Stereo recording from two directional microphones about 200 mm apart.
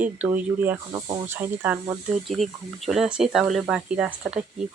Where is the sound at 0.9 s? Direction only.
20° right (ahead or behind).